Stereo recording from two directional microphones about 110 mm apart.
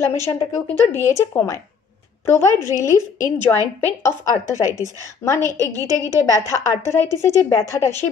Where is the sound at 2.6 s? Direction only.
30° left (ahead or behind).